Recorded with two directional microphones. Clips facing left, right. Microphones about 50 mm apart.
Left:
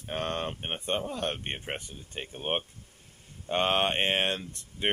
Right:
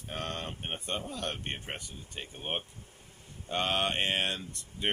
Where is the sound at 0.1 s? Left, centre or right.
Left.